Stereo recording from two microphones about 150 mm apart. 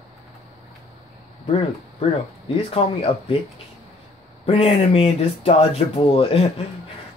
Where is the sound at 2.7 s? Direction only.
40° left (ahead or behind).